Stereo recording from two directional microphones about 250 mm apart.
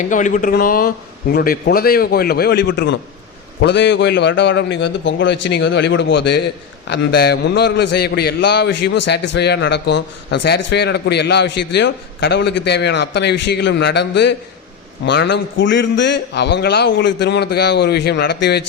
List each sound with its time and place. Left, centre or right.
0.0 s a man's voice: left